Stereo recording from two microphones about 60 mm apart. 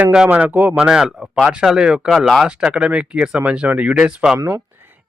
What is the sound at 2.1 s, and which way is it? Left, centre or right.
Speech, centre.